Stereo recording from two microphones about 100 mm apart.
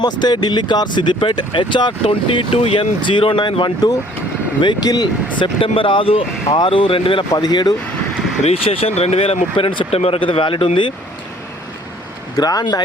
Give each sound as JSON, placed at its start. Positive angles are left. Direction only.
{"t": 0.0, "sound": "speech", "side_deg": 45}
{"t": 2.0, "sound": "speech", "side_deg": 75}
{"t": 5.5, "sound": "speech", "side_deg": 65}
{"t": 7.3, "sound": "speech", "side_deg": 45}
{"t": 8.4, "sound": "speech", "side_deg": 75}
{"t": 12.4, "sound": "speech", "side_deg": 40}